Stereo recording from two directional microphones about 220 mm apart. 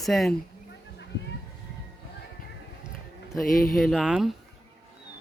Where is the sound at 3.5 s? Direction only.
40° left (ahead or behind).